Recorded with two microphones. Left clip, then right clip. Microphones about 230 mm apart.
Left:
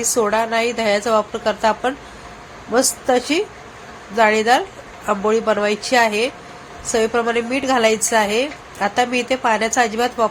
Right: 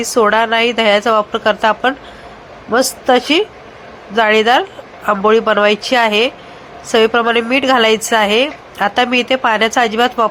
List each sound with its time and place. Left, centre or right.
0.0 s a woman's voice: centre
3.1 s a woman's voice: centre